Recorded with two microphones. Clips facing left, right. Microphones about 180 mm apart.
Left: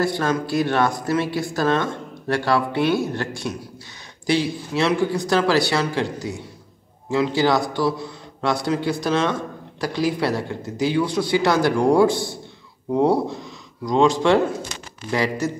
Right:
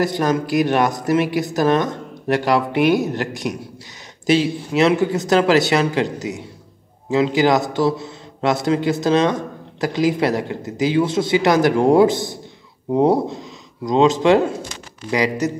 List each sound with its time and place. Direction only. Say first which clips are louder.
0.0 s a man's voice: right 3 dB; 20° right (ahead or behind)